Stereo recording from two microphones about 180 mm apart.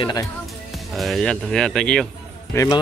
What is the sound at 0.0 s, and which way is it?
Speech, 20° left (ahead or behind).